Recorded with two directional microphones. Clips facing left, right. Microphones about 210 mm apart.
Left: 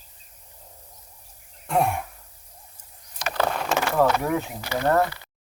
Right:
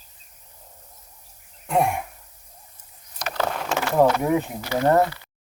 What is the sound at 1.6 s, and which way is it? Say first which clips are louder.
Throat clearing: right 1 dB; 10° right (ahead or behind).